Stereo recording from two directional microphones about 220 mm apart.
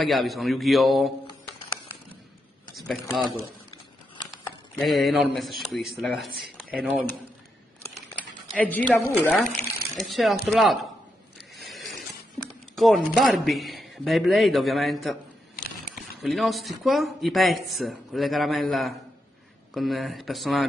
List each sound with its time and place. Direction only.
0.0 s speech: centre (ahead or behind)
3.2 s speech: centre (ahead or behind)
4.7 s speech: centre (ahead or behind)
8.5 s a woman's voice: 5° left (ahead or behind)
11.5 s a sound: centre (ahead or behind)
12.7 s speech: centre (ahead or behind)
16.2 s speech: centre (ahead or behind)